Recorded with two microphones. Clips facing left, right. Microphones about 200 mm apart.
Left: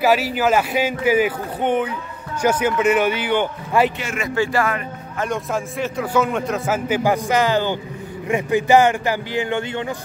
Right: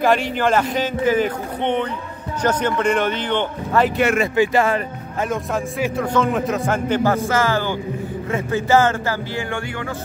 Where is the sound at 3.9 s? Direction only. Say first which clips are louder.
Right 10 dB; 50° right (ahead or behind).